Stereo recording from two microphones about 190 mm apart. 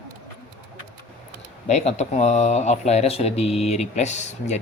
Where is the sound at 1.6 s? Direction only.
35° left (ahead or behind).